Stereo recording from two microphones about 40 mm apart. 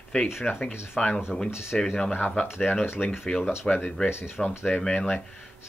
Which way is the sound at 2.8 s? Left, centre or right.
Left.